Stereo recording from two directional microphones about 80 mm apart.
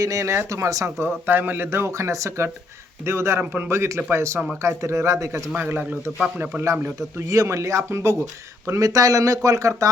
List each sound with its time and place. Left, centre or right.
0.0 s speech: right
1.3 s speech: right
5.5 s a man's voice: right